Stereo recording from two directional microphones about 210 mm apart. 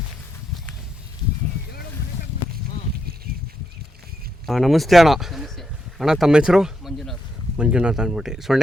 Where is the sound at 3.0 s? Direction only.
45° right (ahead or behind).